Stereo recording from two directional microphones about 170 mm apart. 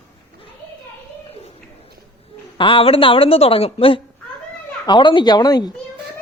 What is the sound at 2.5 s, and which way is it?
A woman's voice, 30° left (ahead or behind).